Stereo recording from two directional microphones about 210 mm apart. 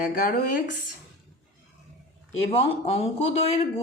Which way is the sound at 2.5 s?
25° left (ahead or behind).